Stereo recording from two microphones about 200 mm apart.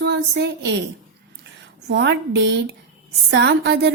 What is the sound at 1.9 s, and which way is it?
A woman's voice, 60° right (ahead or behind).